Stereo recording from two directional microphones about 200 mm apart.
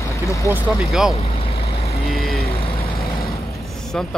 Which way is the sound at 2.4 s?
30° left (ahead or behind).